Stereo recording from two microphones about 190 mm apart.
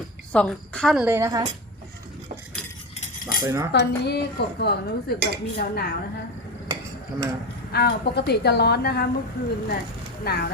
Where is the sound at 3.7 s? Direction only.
60° left (ahead or behind).